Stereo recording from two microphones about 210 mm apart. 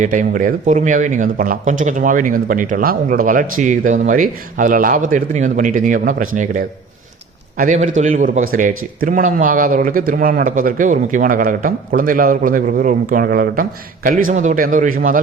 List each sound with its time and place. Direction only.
0.0 s speech: 40° right (ahead or behind)